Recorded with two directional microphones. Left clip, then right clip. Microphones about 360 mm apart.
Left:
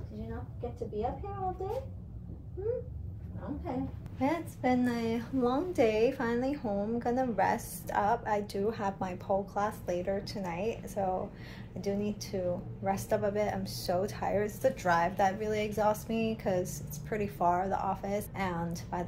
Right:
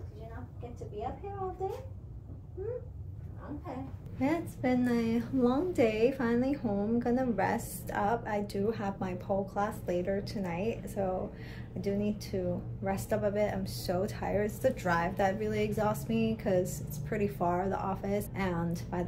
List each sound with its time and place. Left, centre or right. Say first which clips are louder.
4.2 s a woman's voice: even; centre